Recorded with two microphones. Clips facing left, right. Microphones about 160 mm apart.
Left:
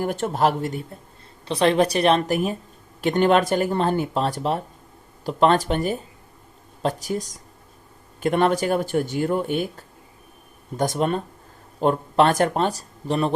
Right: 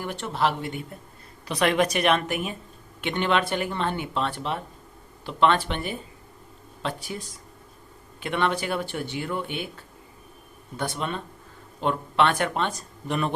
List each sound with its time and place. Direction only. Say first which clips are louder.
0.0 s speech: left 5 dB; 45° left (ahead or behind)